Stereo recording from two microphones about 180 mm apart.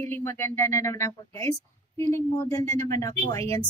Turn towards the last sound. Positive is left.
turn(degrees=20)  # may be behind; listen again after turning